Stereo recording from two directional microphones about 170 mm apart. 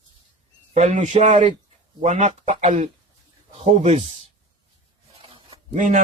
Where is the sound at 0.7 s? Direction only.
45° right (ahead or behind).